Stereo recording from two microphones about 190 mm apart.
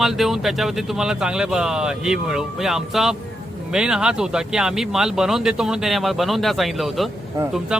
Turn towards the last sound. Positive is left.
turn(degrees=-5)  # may be behind; listen again after turning